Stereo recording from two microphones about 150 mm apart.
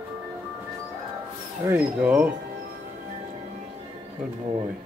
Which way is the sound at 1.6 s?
10° right (ahead or behind).